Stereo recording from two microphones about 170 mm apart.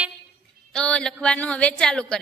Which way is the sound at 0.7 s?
5° left (ahead or behind).